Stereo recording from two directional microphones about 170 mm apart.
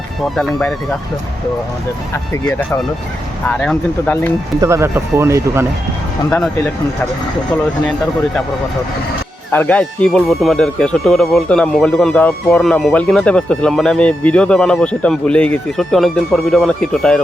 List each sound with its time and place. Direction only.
2.4 s speech: 5° left (ahead or behind)
4.6 s speech: 15° right (ahead or behind)
9.5 s speech: 10° left (ahead or behind)